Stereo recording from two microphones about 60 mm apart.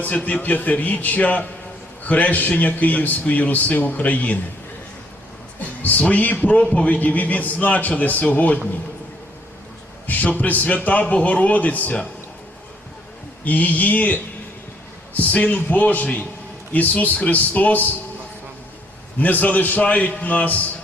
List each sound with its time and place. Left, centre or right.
0.0 s a man's voice: left
5.5 s a man's voice: left
10.1 s a man's voice: left
13.4 s a man's voice: left
19.2 s a man's voice: left